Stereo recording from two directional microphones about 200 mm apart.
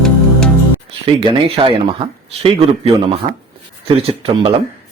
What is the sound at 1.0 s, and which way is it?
A man's voice, 25° right (ahead or behind).